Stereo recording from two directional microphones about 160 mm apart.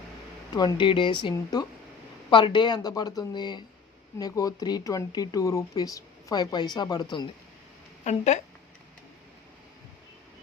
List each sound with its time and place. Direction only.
0.5 s speech: 30° left (ahead or behind)
8.0 s a woman's voice: 45° left (ahead or behind)